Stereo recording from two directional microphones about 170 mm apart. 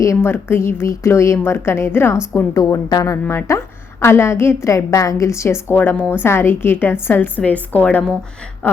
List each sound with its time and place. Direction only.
0.0 s a woman's voice: 15° left (ahead or behind)